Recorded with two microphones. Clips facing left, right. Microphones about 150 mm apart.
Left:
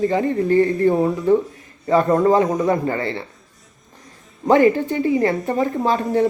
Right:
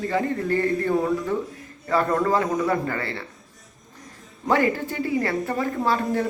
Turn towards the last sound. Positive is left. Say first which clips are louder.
# left 5 dB
turn(degrees=20)  # may be behind; listen again after turning